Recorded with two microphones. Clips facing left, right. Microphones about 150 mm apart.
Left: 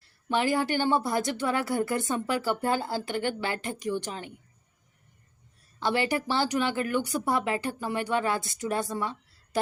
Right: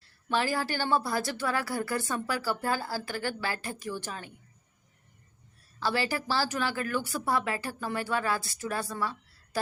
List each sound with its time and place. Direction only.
0.3 s a woman's voice: 20° left (ahead or behind)
5.8 s a woman's voice: 20° left (ahead or behind)